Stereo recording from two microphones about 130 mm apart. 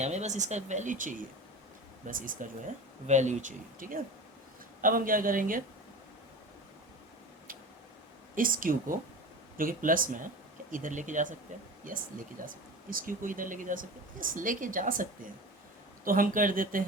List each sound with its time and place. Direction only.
0.0 s speech: 60° right (ahead or behind); by 2.5 s 90° right
3.1 s speech: 65° right (ahead or behind); by 5.6 s 90° right
8.4 s speech: 90° right
11.9 s speech: 90° right